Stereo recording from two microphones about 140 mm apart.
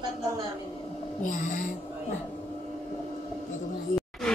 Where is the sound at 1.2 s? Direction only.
70° left (ahead or behind).